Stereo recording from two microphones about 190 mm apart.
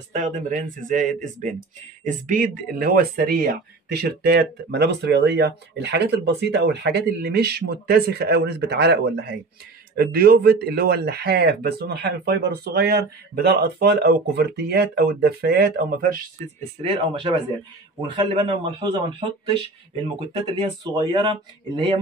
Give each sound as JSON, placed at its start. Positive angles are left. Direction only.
{"t": 0.1, "sound": "speech", "side_deg": -40}
{"t": 16.8, "sound": "speech", "side_deg": -25}